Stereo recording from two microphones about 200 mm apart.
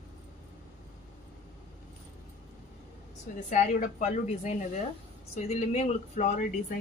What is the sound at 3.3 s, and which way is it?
A woman's voice, 35° left (ahead or behind).